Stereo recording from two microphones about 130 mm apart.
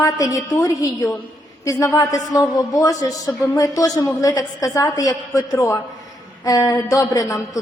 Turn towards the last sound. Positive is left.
turn(degrees=25)  # may be behind; listen again after turning